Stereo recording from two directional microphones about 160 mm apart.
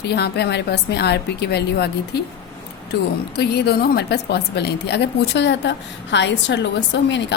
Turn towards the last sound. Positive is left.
turn(degrees=90)